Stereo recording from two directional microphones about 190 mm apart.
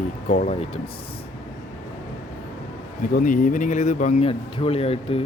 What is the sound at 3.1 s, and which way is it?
Speech, 45° left (ahead or behind).